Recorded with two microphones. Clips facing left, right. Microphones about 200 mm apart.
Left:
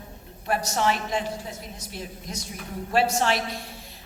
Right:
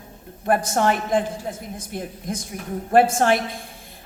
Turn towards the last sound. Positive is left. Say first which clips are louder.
# right 5 dB
turn(degrees=-50)  # may be behind; listen again after turning